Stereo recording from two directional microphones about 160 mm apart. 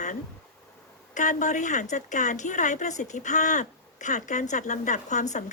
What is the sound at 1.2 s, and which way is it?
A woman's voice, 50° left (ahead or behind).